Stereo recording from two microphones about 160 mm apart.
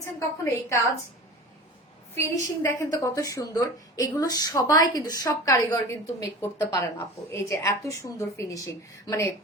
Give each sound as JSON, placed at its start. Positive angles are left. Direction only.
{"t": 0.0, "sound": "a woman's voice", "side_deg": 20}
{"t": 2.1, "sound": "a woman's voice", "side_deg": 15}